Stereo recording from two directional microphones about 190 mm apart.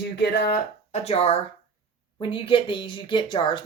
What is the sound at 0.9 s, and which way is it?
Speech, 35° left (ahead or behind).